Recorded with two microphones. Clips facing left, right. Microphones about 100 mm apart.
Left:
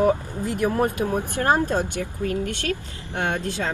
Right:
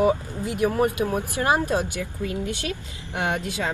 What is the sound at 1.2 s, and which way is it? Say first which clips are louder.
A woman's voice: left 2 dB; 15° right (ahead or behind).